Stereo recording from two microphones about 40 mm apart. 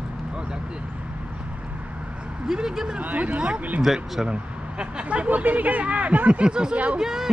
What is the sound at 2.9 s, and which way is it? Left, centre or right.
Speech, right.